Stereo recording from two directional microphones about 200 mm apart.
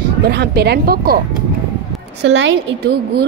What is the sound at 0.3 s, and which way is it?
Speech, 55° right (ahead or behind).